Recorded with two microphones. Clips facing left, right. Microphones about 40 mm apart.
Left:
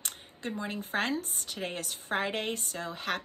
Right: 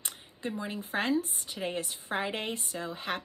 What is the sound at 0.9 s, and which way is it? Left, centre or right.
Speech, left.